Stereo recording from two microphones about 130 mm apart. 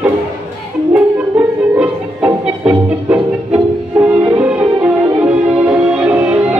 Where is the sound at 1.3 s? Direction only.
10° right (ahead or behind).